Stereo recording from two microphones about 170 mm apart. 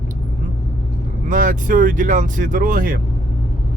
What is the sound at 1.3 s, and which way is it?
Speech, 50° right (ahead or behind).